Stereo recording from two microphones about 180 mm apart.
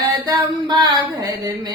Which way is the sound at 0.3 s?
25° right (ahead or behind).